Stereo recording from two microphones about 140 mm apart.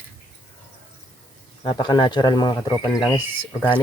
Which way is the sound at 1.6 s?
30° left (ahead or behind).